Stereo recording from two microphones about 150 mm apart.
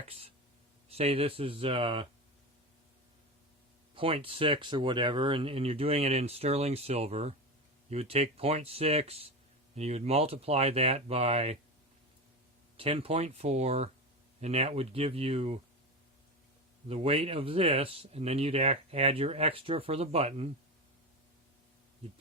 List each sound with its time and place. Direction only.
0.9 s speech: 40° right (ahead or behind)
3.9 s speech: 40° right (ahead or behind)
12.7 s speech: 40° right (ahead or behind)
16.9 s speech: 40° right (ahead or behind)